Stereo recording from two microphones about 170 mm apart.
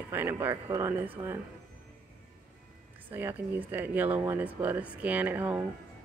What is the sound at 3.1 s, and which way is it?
Speech, 10° right (ahead or behind).